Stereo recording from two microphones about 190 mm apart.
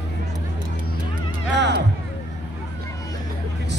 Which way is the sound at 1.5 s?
65° right (ahead or behind).